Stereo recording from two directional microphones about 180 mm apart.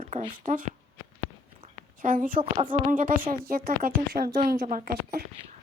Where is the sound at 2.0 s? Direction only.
50° right (ahead or behind).